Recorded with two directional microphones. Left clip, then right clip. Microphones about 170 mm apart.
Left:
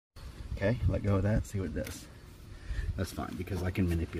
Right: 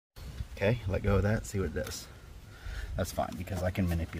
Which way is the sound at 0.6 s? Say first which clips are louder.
Right 2 dB; 55° right (ahead or behind).